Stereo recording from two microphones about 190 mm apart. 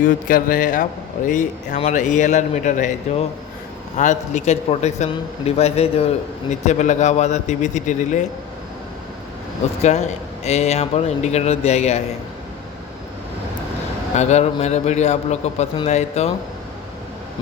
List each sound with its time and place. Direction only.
0.0 s speech: 45° left (ahead or behind)
9.8 s speech: 35° left (ahead or behind)
14.2 s speech: 35° left (ahead or behind)